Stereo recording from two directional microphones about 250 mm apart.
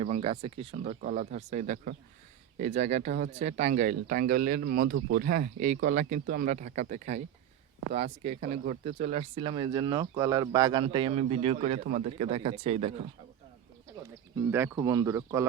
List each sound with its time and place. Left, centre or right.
0.0 s speech: right
14.3 s speech: centre